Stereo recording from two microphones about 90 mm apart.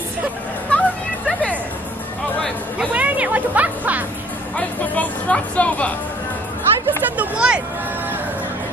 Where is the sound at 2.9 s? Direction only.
15° right (ahead or behind).